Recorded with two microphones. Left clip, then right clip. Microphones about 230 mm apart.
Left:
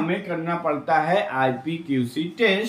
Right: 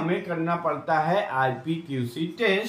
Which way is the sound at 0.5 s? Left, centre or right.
Right.